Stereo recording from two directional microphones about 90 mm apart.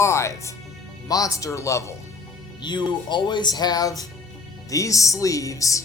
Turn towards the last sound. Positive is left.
turn(degrees=40)  # may be behind; listen again after turning